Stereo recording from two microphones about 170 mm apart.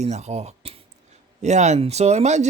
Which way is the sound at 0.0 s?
40° right (ahead or behind).